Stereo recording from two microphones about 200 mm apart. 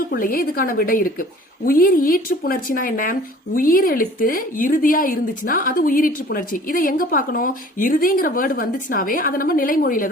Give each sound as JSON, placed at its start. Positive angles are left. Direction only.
{"t": 0.1, "sound": "speech", "side_deg": 45}